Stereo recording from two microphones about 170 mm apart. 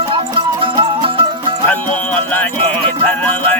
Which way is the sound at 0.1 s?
30° right (ahead or behind).